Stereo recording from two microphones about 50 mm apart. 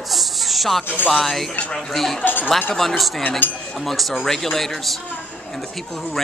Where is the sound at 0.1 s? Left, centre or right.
Centre.